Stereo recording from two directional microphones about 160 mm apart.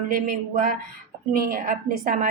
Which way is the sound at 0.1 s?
55° right (ahead or behind).